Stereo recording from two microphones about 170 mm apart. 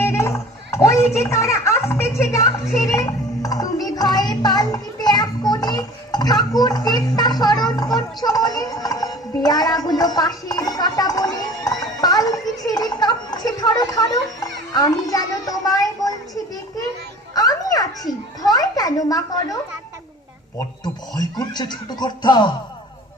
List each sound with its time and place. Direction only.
0.0 s a child's voice: 15° left (ahead or behind)
8.2 s music: 20° left (ahead or behind)
14.7 s a sound: 20° left (ahead or behind)
21.2 s speech: 25° left (ahead or behind)